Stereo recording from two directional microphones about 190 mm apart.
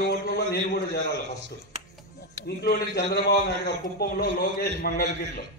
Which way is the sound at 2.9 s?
60° left (ahead or behind).